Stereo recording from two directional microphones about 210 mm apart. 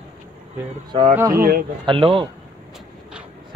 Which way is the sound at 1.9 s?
25° right (ahead or behind).